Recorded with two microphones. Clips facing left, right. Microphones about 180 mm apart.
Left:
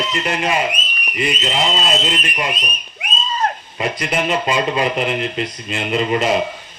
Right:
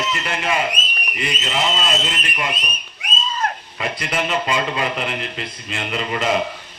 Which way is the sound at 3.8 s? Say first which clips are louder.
Left 4 dB; 20° left (ahead or behind).